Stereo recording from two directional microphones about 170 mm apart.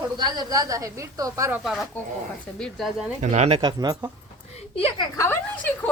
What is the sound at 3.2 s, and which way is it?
Speech, 40° right (ahead or behind).